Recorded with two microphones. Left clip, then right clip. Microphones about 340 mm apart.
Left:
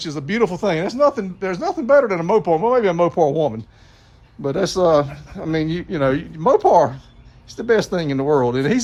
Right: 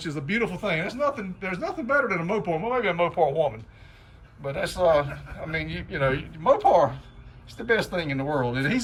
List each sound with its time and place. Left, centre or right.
0.0 s speech: centre
2.8 s speech: left
4.8 s speech: left
5.5 s speech: centre